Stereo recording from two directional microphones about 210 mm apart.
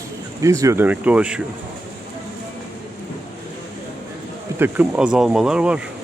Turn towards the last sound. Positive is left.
turn(degrees=-5)  # may be behind; listen again after turning